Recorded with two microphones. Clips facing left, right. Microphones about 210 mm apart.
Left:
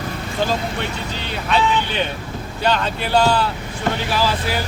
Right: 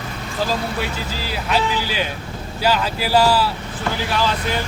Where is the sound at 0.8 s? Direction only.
5° right (ahead or behind).